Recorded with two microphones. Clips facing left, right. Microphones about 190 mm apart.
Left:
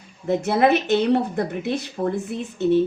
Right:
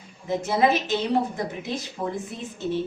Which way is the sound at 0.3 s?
60° left (ahead or behind).